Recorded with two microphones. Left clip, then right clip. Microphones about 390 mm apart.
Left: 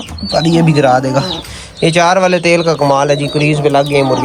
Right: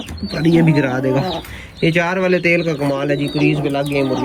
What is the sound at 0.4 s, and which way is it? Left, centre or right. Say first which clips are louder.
Speech: left 3 dB; left.